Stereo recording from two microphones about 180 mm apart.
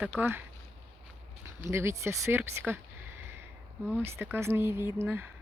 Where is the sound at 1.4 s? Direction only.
15° right (ahead or behind).